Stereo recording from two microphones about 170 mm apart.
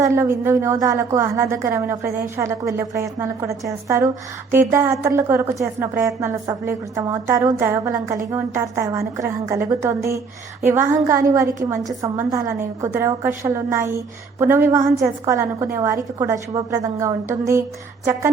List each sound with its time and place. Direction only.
0.0 s speech: 15° right (ahead or behind)